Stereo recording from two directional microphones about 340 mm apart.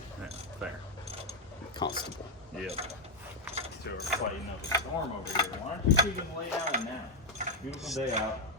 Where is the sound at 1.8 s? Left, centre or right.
Centre.